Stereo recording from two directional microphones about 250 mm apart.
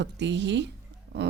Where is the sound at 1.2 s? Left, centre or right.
Right.